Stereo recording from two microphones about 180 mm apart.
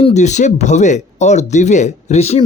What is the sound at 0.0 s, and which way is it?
Speech, 40° left (ahead or behind).